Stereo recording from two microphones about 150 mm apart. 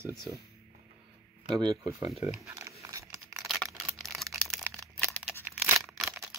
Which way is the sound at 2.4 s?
20° right (ahead or behind).